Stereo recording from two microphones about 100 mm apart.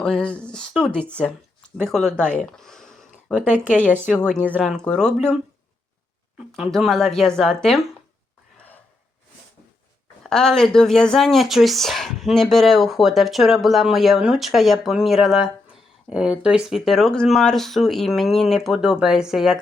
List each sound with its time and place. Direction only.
0.0 s speech: 10° left (ahead or behind)
3.4 s speech: 15° right (ahead or behind)
4.0 s speech: 10° left (ahead or behind)
6.7 s speech: 5° left (ahead or behind)
10.2 s speech: 5° left (ahead or behind)